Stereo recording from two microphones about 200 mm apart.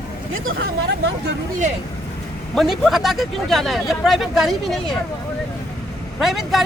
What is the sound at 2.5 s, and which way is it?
Speech, centre (ahead or behind).